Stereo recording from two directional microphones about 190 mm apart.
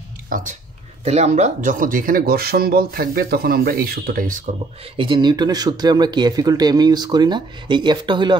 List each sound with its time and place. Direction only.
0.3 s speech: 40° right (ahead or behind)
4.9 s speech: 25° right (ahead or behind)